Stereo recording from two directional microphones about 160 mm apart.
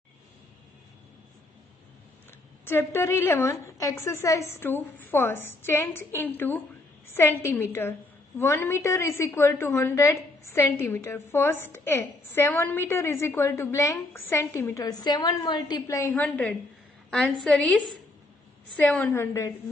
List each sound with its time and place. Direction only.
2.6 s a woman's voice: 15° left (ahead or behind)